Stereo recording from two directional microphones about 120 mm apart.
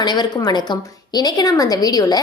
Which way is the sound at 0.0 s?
35° left (ahead or behind).